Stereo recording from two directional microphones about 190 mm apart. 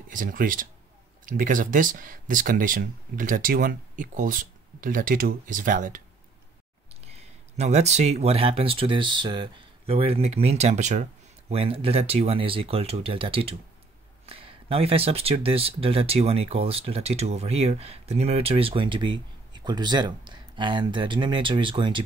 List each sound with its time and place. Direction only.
0.1 s speech: 45° right (ahead or behind)
7.2 s speech: 35° right (ahead or behind)